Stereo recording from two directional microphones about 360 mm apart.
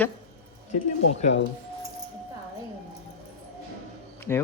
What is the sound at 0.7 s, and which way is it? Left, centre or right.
Speech, left.